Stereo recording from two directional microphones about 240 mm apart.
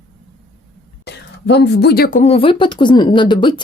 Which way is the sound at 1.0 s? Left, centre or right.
Left.